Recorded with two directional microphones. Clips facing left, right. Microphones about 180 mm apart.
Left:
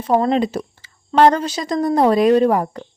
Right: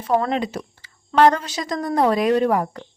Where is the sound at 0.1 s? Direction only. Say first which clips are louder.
Left 4 dB; 30° left (ahead or behind).